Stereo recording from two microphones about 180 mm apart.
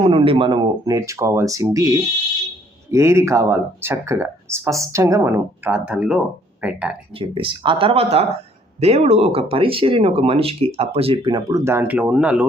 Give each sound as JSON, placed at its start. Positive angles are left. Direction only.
{"t": 0.0, "sound": "speech", "side_deg": -30}
{"t": 7.2, "sound": "speech", "side_deg": -30}